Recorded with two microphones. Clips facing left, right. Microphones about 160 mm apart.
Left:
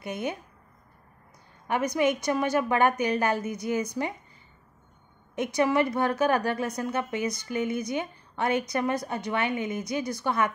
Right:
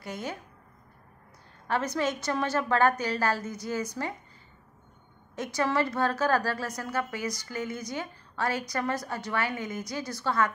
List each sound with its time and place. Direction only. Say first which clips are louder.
0.0 s a woman's voice: left 4 dB; 20° left (ahead or behind)
1.7 s a woman's voice: left 4 dB; 15° left (ahead or behind)
5.3 s a woman's voice: left 4 dB; 20° left (ahead or behind)